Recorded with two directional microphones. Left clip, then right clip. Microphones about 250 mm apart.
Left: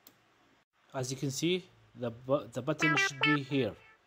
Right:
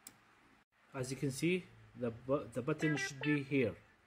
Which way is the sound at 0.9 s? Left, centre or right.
Centre.